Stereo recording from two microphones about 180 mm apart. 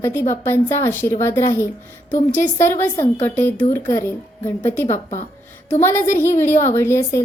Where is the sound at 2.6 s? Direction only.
10° left (ahead or behind).